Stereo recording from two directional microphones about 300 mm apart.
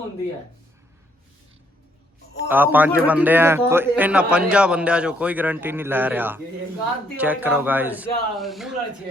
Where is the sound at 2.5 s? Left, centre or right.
Centre.